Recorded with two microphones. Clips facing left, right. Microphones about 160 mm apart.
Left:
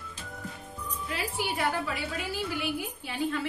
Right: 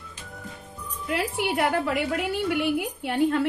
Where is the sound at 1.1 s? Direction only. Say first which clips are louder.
Right 7 dB; 70° right (ahead or behind).